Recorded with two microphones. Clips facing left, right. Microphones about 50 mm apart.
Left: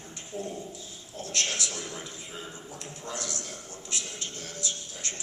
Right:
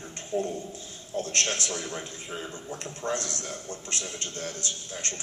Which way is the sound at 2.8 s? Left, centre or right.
Right.